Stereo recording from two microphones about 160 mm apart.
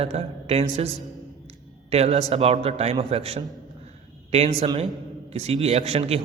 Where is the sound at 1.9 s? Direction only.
40° right (ahead or behind).